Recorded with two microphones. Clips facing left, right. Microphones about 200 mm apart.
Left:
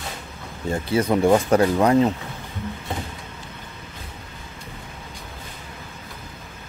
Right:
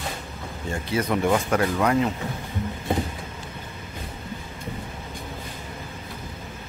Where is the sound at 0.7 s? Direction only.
30° left (ahead or behind).